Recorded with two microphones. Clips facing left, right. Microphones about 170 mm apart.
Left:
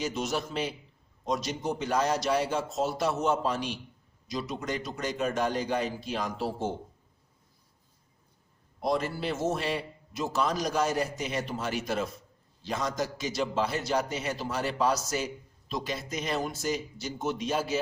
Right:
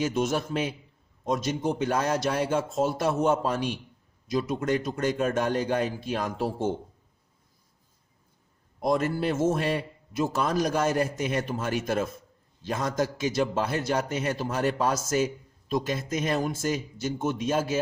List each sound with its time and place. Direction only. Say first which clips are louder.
0.0 s a man's voice: right 5 dB; 50° right (ahead or behind)
8.8 s a man's voice: right 4 dB; 50° right (ahead or behind)